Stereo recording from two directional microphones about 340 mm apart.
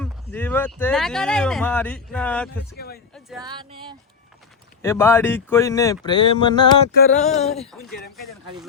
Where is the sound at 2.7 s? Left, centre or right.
Left.